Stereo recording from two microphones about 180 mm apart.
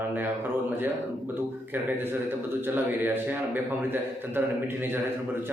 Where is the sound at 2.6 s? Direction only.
10° right (ahead or behind).